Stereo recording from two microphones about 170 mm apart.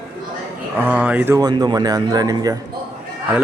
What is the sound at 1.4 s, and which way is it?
Speech, 25° right (ahead or behind).